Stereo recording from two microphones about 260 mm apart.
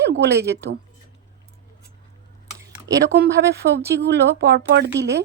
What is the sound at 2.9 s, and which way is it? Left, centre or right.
Speech, centre.